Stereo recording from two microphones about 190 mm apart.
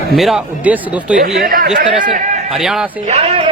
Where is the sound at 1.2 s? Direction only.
55° right (ahead or behind).